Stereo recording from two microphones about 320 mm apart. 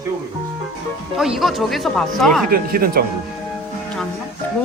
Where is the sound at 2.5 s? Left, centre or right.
Right.